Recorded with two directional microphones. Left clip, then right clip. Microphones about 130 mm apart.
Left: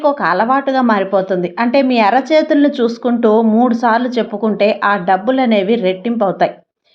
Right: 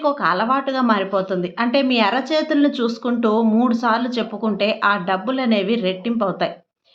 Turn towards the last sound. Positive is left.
turn(degrees=35)  # may be behind; listen again after turning